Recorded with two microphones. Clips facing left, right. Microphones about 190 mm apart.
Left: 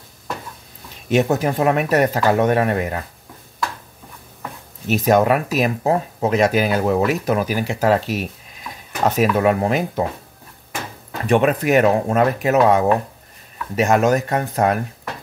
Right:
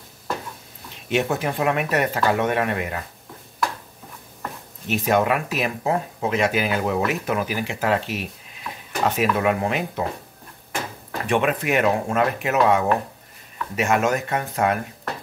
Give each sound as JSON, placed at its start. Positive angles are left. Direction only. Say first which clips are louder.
{"t": 1.0, "sound": "speech", "louder": "left 5 dB", "side_deg": 40}
{"t": 4.8, "sound": "speech", "louder": "left 5 dB", "side_deg": 40}
{"t": 11.2, "sound": "speech", "louder": "left 5 dB", "side_deg": 40}